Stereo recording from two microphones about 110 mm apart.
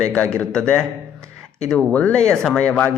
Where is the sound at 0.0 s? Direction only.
10° left (ahead or behind).